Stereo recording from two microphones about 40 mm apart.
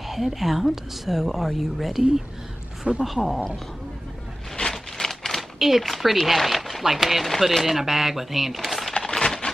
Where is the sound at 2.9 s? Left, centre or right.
Right.